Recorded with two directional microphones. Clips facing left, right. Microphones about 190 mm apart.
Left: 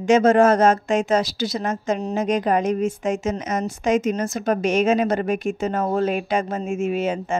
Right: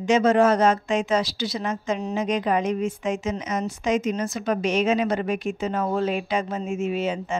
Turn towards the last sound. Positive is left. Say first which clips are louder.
# left 3 dB
turn(degrees=50)  # may be behind; listen again after turning